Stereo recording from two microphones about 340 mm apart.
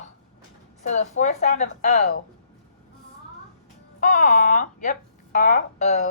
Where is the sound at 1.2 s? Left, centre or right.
Centre.